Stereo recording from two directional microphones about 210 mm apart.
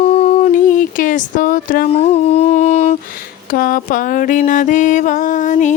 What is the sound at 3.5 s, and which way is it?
Mantra, 40° left (ahead or behind).